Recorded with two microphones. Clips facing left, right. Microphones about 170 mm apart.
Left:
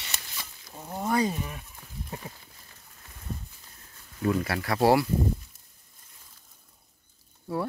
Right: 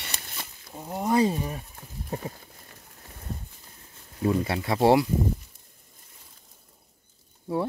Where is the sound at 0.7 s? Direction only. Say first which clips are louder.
Right 3 dB; 15° right (ahead or behind); by 2.4 s 35° right (ahead or behind).